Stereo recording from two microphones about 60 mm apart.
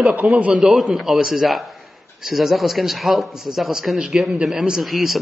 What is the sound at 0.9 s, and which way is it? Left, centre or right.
A man's voice, centre.